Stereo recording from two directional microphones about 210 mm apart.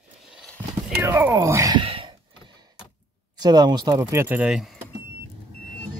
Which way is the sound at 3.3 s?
20° right (ahead or behind).